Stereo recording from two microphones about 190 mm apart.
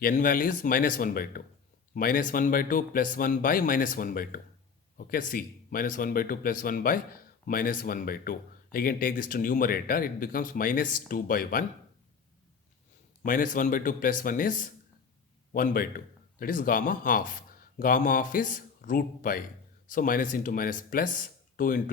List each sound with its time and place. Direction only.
0.0 s speech: 45° left (ahead or behind)
13.2 s speech: 45° left (ahead or behind)